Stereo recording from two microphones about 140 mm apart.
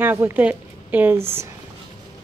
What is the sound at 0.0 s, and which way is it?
Speech, 15° right (ahead or behind).